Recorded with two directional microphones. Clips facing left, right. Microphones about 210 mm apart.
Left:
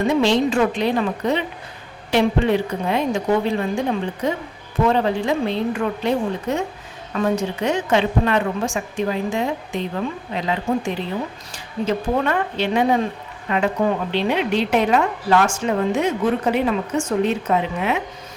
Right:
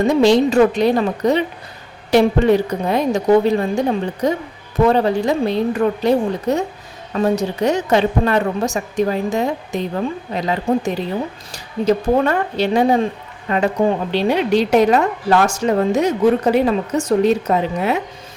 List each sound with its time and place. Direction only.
0.1 s a woman's voice: 40° right (ahead or behind)